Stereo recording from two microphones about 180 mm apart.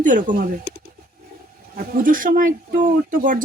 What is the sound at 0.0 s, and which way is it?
Speech, 45° right (ahead or behind).